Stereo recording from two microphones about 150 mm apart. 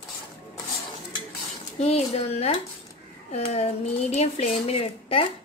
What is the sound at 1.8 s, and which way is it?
Speech, 45° left (ahead or behind).